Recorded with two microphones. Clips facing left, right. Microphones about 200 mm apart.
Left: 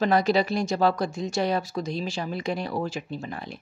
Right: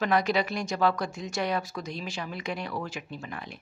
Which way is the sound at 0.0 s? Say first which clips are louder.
Left 4 dB; 35° left (ahead or behind).